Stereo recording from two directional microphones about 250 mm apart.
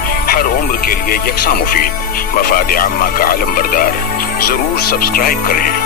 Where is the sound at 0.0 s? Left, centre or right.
Left.